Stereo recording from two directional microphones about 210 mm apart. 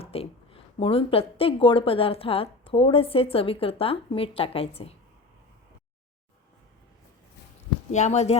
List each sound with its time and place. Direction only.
0.0 s a woman's voice: 30° left (ahead or behind)
7.9 s speech: 35° left (ahead or behind)